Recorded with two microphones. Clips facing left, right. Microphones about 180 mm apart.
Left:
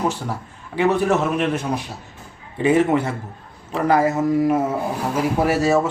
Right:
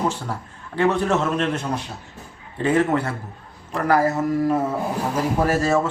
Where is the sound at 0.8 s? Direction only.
15° left (ahead or behind).